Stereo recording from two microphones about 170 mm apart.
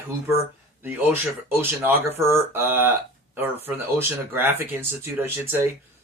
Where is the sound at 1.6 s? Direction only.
10° right (ahead or behind).